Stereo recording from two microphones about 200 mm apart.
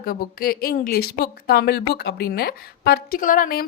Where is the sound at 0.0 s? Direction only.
45° left (ahead or behind).